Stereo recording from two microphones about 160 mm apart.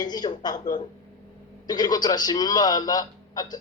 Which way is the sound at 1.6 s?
25° left (ahead or behind).